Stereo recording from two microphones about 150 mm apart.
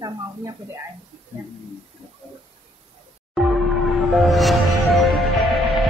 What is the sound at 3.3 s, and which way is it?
Music, centre (ahead or behind).